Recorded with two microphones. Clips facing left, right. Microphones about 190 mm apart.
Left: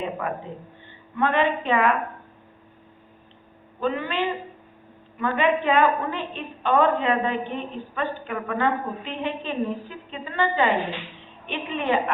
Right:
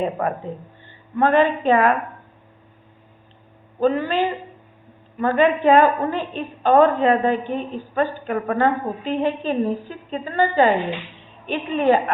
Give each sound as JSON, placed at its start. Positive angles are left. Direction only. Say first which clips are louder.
{"t": 0.0, "sound": "a woman's voice", "louder": "right 6 dB", "side_deg": -40}
{"t": 3.8, "sound": "a woman's voice", "louder": "right 6 dB", "side_deg": -40}